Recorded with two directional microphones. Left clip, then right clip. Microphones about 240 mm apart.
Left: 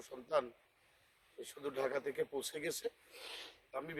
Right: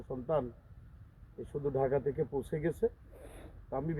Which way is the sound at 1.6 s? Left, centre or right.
Centre.